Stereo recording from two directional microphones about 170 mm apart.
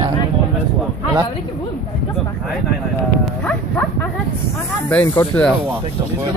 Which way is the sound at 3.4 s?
10° left (ahead or behind).